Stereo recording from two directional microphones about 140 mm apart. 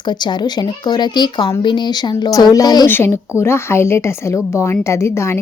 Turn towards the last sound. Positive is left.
turn(degrees=20)  # may be behind; listen again after turning